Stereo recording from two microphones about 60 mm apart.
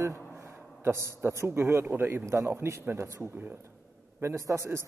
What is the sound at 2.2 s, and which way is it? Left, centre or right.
Speech, right.